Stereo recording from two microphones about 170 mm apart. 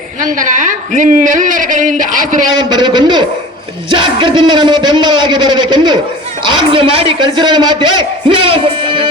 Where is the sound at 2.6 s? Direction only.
25° right (ahead or behind).